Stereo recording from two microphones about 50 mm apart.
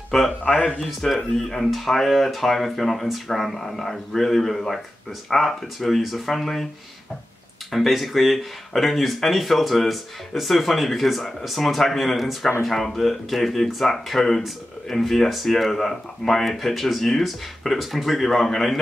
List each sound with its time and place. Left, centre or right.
0.1 s speech: centre
7.7 s speech: centre